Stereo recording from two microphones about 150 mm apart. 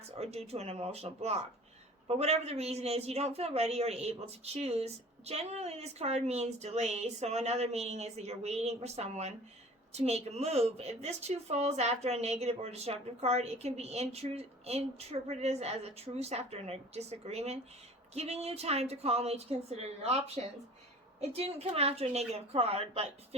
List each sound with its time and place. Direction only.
0.2 s speech: 45° right (ahead or behind)